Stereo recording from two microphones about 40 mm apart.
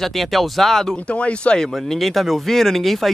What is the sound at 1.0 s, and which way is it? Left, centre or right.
Speech, left.